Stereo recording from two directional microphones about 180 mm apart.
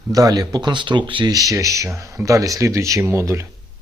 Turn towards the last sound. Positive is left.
turn(degrees=-15)  # may be behind; listen again after turning